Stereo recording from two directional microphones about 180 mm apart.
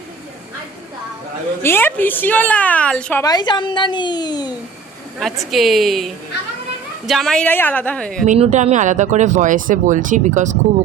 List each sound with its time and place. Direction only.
1.6 s a woman's voice: 10° left (ahead or behind)
3.2 s a woman's voice: 25° left (ahead or behind)
5.5 s speech: centre (ahead or behind)
7.1 s speech: centre (ahead or behind)
8.3 s speech: 40° right (ahead or behind)